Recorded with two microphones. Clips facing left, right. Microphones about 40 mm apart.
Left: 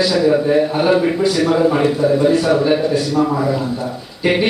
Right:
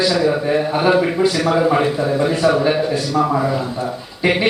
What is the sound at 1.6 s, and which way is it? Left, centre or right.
A man's voice, centre.